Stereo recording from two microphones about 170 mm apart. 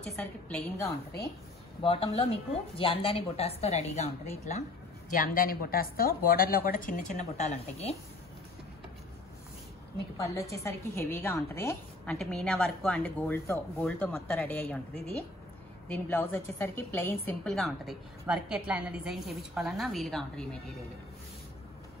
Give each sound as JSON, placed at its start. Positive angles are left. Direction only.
{"t": 0.0, "sound": "a woman's voice", "side_deg": 5}
{"t": 1.8, "sound": "a woman's voice", "side_deg": 30}
{"t": 5.1, "sound": "a woman's voice", "side_deg": 55}
{"t": 9.9, "sound": "a woman's voice", "side_deg": 20}